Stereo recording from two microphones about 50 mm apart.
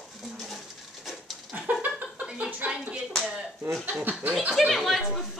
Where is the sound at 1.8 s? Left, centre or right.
Right.